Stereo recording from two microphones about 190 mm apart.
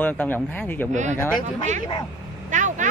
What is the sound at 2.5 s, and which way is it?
Vehicle, 40° right (ahead or behind).